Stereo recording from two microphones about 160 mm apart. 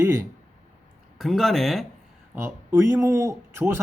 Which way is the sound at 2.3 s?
15° right (ahead or behind).